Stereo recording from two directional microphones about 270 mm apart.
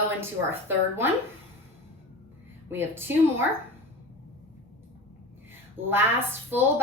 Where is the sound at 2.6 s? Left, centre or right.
Centre.